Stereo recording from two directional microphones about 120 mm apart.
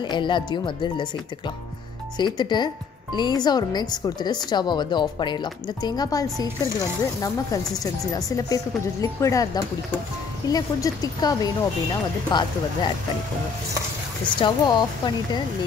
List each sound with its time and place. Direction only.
0.0 s speech: 40° left (ahead or behind)
2.1 s speech: 35° left (ahead or behind)
10.5 s speech: 30° left (ahead or behind)
14.4 s speech: 35° left (ahead or behind)